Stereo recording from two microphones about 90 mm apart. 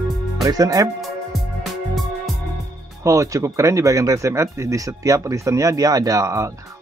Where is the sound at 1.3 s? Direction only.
Centre (ahead or behind).